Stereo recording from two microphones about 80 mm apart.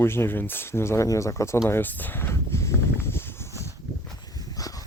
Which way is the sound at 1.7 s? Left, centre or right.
Left.